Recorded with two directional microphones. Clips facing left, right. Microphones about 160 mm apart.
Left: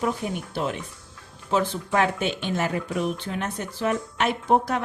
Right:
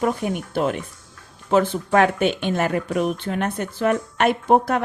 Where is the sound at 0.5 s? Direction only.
55° right (ahead or behind).